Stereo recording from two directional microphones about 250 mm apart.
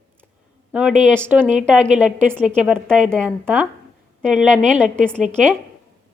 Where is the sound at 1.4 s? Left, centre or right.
Right.